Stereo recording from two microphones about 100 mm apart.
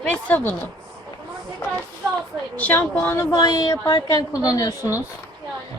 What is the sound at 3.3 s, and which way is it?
A woman's voice, 40° left (ahead or behind).